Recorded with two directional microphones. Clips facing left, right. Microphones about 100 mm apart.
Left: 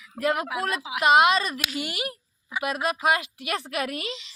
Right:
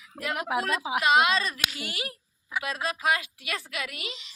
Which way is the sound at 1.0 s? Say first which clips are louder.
Left 4 dB; 25° left (ahead or behind).